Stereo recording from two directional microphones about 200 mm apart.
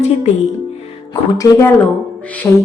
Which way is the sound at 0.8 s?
25° left (ahead or behind).